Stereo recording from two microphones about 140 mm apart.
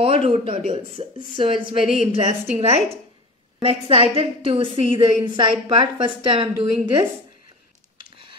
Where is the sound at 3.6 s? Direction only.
45° right (ahead or behind).